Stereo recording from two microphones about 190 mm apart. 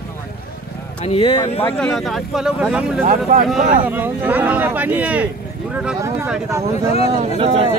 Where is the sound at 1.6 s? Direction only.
5° left (ahead or behind).